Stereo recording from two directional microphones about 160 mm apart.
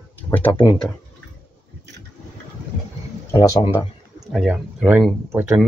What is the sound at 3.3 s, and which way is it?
Speech, 20° left (ahead or behind).